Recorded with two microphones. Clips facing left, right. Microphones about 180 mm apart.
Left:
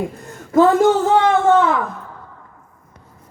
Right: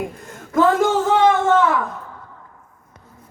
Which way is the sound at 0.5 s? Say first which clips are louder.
Left 3 dB; 25° left (ahead or behind).